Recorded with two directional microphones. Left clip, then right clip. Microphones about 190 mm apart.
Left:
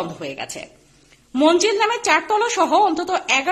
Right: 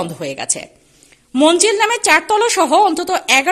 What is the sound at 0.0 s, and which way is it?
A woman's voice, 40° right (ahead or behind).